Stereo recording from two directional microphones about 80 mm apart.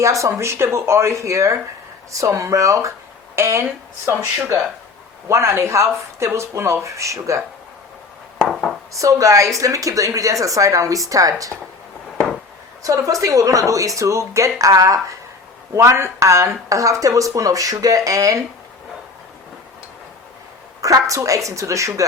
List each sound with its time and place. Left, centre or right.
0.0 s speech: right
8.9 s speech: right
12.8 s speech: right
20.8 s a woman's voice: right